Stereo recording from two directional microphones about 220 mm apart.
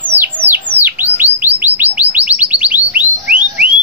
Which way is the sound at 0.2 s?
10° right (ahead or behind).